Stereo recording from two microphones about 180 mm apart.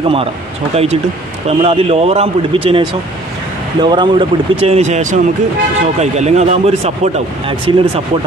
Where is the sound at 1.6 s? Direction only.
35° right (ahead or behind).